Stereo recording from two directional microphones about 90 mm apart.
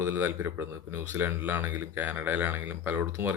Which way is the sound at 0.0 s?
25° right (ahead or behind).